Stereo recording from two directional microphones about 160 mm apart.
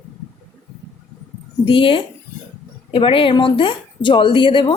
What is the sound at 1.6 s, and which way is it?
A woman's voice, 35° left (ahead or behind).